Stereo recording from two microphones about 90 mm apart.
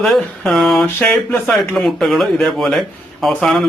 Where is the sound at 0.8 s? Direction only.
25° left (ahead or behind).